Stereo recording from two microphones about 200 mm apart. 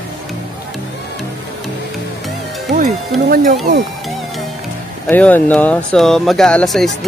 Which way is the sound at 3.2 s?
50° right (ahead or behind).